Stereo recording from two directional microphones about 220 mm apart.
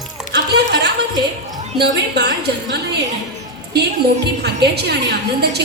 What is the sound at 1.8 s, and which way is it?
Speech, 50° right (ahead or behind).